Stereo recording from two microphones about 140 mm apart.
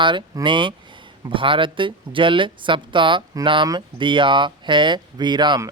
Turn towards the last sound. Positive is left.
turn(degrees=-30)  # may be behind; listen again after turning